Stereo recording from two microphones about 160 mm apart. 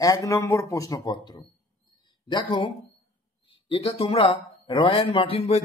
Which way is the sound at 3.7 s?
35° left (ahead or behind).